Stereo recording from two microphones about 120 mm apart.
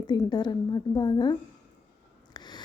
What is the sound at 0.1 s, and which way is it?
A woman's voice, 35° left (ahead or behind).